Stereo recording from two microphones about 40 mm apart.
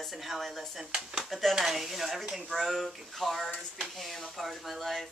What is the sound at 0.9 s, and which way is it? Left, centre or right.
Speech, right.